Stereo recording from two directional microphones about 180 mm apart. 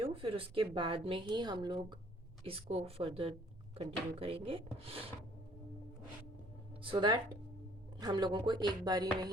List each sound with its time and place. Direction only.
0.0 s a woman's voice: 30° right (ahead or behind)
6.8 s a woman's voice: 30° right (ahead or behind)